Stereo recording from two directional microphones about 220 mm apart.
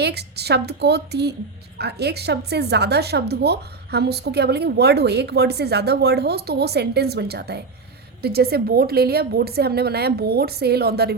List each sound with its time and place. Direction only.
0.0 s speech: 50° right (ahead or behind)